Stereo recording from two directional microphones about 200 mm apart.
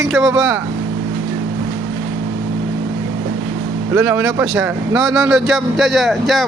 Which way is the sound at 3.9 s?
10° right (ahead or behind).